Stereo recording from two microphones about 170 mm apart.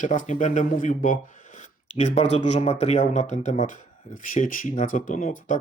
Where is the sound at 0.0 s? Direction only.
45° left (ahead or behind).